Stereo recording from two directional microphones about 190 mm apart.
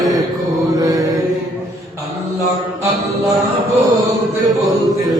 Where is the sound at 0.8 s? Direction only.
20° right (ahead or behind).